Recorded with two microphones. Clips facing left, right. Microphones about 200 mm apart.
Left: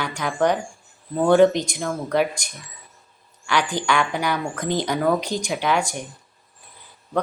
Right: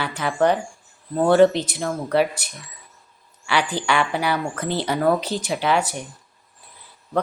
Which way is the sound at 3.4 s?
10° right (ahead or behind).